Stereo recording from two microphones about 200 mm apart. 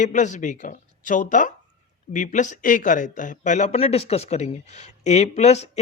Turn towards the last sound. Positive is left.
turn(degrees=35)  # may be behind; listen again after turning